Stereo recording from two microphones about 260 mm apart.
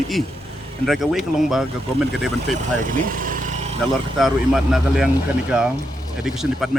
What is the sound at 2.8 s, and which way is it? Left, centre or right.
Vehicle, right.